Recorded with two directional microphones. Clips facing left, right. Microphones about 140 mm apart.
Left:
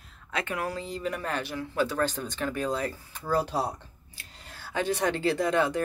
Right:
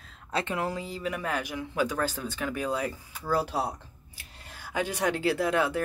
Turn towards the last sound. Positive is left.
turn(degrees=-5)  # may be behind; listen again after turning